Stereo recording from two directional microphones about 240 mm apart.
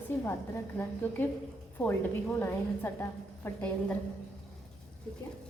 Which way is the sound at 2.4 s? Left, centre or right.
Centre.